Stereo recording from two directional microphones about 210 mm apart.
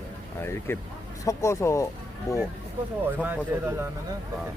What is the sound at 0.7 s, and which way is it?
Speech, 10° left (ahead or behind).